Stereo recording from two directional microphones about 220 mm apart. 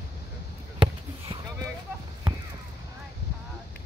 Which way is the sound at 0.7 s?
20° right (ahead or behind).